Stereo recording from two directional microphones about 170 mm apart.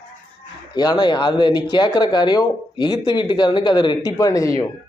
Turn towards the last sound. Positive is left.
turn(degrees=20)  # may be behind; listen again after turning